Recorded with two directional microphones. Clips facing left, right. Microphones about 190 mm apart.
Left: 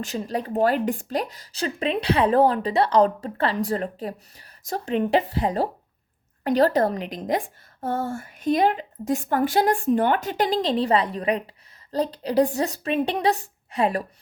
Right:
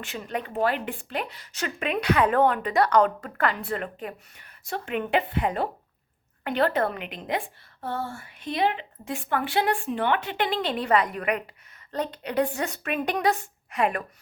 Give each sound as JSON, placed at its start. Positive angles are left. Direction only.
{"t": 0.0, "sound": "speech", "side_deg": 35}